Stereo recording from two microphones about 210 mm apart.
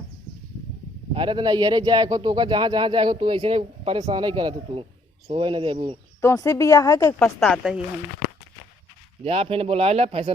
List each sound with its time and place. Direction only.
1.1 s speech: 25° right (ahead or behind)
6.2 s speech: 15° left (ahead or behind)
7.3 s speech: centre (ahead or behind)
9.2 s speech: 25° right (ahead or behind)